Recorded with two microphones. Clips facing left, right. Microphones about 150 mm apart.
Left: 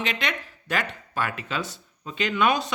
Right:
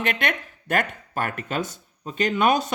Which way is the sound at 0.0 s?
55° right (ahead or behind).